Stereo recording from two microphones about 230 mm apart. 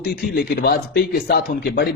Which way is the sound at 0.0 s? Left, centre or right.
Left.